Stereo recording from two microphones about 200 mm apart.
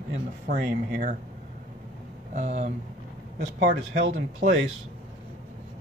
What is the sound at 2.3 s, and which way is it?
Speech, 35° right (ahead or behind).